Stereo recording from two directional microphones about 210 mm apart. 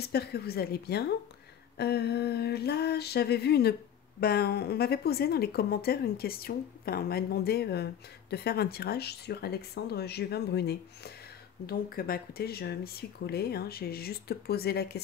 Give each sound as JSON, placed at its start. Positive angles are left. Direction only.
{"t": 0.0, "sound": "speech", "side_deg": 50}